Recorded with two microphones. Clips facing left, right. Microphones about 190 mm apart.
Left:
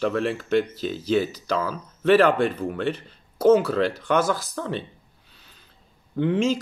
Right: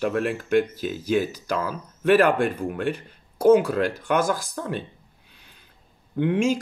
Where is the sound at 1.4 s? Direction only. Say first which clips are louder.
Left 1 dB; 50° right (ahead or behind).